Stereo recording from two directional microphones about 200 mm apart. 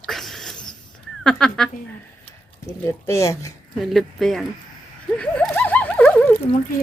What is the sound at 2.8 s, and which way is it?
Speech, 15° left (ahead or behind).